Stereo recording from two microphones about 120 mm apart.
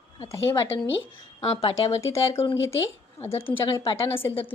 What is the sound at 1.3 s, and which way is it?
Speech, 55° left (ahead or behind).